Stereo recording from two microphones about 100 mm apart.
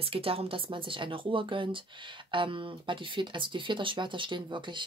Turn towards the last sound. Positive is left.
turn(degrees=-50)  # may be behind; listen again after turning